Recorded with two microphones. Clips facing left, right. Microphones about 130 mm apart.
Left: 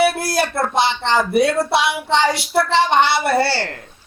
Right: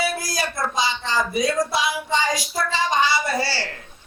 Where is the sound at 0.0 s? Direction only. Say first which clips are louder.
Left 8 dB; 65° left (ahead or behind).